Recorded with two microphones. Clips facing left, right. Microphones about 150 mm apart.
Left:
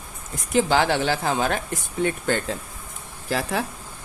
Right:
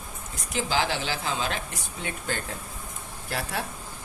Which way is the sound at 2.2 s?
75° left (ahead or behind).